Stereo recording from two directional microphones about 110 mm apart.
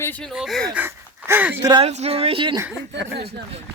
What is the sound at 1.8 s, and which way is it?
Speech, 80° right.